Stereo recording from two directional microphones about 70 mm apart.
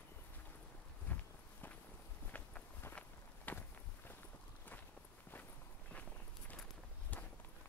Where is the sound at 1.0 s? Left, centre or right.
Left.